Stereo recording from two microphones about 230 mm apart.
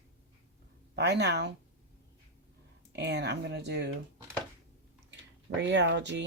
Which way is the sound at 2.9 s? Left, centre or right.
Right.